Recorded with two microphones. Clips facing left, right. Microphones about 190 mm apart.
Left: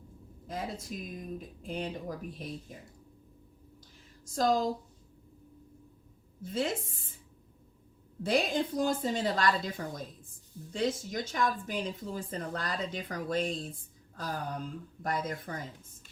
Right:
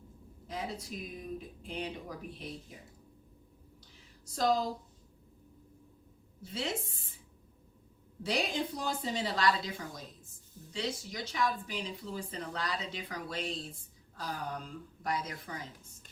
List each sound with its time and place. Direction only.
0.4 s speech: 50° left (ahead or behind)
4.3 s speech: 45° left (ahead or behind)
6.4 s speech: 50° left (ahead or behind)
8.2 s speech: 50° left (ahead or behind)